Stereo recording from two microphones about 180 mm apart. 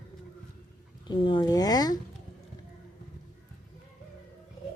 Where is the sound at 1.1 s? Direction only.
25° left (ahead or behind).